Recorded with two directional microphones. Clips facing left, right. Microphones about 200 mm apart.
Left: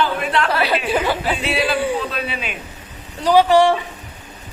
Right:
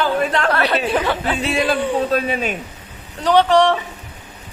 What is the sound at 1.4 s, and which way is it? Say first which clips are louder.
Speech: right 1 dB; 45° right (ahead or behind).